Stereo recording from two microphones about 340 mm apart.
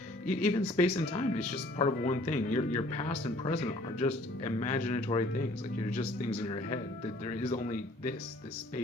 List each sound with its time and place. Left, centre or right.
0.3 s speech: centre
7.3 s speech: centre